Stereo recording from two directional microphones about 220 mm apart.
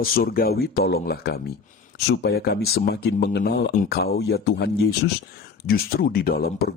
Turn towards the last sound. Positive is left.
turn(degrees=45)  # may be behind; listen again after turning